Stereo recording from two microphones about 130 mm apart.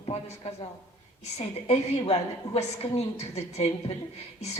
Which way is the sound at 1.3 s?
50° left (ahead or behind).